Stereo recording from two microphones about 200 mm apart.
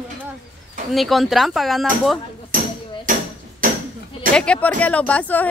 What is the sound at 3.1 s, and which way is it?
Hammer, 40° right (ahead or behind).